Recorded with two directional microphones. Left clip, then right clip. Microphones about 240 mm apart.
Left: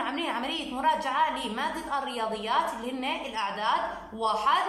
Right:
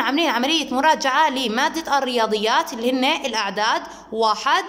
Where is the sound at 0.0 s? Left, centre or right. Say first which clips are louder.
Right 11 dB; right.